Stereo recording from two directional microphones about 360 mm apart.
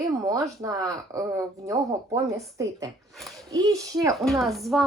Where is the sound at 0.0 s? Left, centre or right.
Centre.